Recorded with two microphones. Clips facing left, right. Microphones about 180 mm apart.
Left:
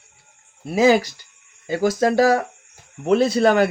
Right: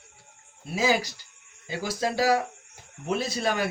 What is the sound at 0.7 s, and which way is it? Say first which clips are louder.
Speech: left 9 dB; 55° left (ahead or behind).